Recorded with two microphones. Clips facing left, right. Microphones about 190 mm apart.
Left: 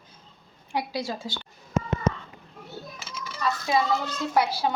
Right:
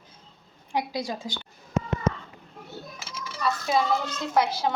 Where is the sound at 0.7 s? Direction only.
20° right (ahead or behind).